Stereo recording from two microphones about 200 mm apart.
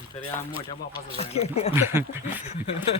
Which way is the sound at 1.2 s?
30° left (ahead or behind).